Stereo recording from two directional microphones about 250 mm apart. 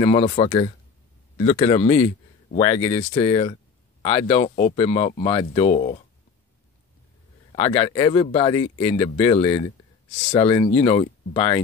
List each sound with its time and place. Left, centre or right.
0.0 s speech: left
7.5 s speech: left